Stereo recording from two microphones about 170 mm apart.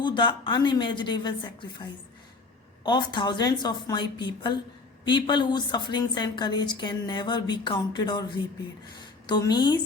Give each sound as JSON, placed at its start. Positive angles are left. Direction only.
{"t": 0.0, "sound": "a woman's voice", "side_deg": 30}